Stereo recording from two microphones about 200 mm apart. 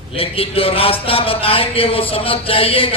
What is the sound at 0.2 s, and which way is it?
Speech, 30° left (ahead or behind).